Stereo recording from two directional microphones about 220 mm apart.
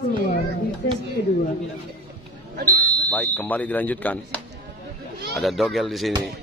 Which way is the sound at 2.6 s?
40° right (ahead or behind).